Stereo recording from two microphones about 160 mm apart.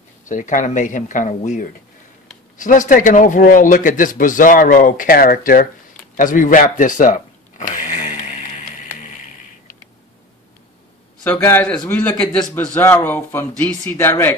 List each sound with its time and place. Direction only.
0.3 s a man's voice: 55° left (ahead or behind)
6.1 s a sound: 55° left (ahead or behind)
11.2 s speech: 15° left (ahead or behind)